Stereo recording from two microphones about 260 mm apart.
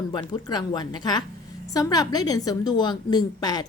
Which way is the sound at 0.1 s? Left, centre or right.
Centre.